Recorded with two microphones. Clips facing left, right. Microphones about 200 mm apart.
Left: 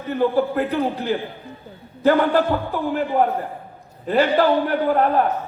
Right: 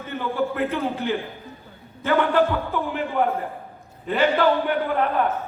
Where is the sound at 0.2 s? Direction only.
35° left (ahead or behind).